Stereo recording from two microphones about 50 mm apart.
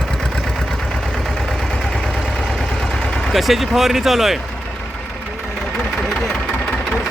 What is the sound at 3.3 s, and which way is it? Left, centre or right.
Speech, centre.